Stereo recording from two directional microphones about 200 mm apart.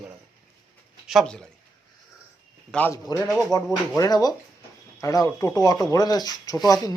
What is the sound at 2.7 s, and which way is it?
Speech, 10° left (ahead or behind).